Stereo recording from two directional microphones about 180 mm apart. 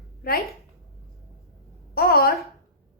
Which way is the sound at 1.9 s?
60° left (ahead or behind).